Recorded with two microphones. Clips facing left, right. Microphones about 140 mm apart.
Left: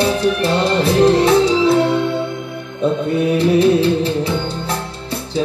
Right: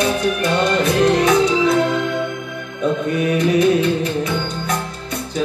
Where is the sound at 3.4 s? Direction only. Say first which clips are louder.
Left 2 dB; 30° left (ahead or behind).